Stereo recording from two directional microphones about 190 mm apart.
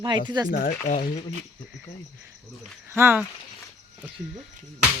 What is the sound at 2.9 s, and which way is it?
Speech, 10° right (ahead or behind).